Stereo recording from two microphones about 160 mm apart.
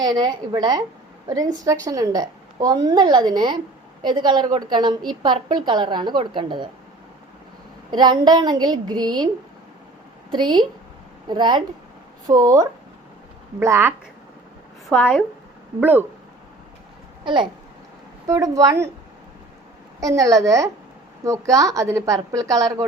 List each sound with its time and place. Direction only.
0.0 s a woman's voice: 25° right (ahead or behind)
7.9 s a woman's voice: 25° right (ahead or behind)
10.3 s a woman's voice: 30° right (ahead or behind)
14.8 s a woman's voice: centre (ahead or behind)
15.8 s speech: 10° right (ahead or behind)
17.2 s a woman's voice: 30° right (ahead or behind)
20.0 s a woman's voice: 20° right (ahead or behind)